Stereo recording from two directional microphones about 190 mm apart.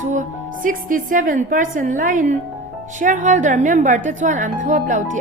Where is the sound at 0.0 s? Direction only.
40° right (ahead or behind).